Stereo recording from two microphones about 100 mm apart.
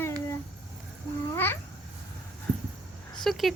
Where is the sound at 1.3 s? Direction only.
20° left (ahead or behind).